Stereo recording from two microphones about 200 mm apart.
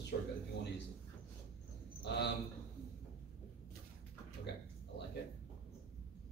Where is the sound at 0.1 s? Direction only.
50° left (ahead or behind).